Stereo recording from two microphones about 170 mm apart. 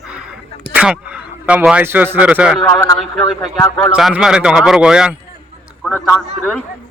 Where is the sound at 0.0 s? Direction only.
5° right (ahead or behind).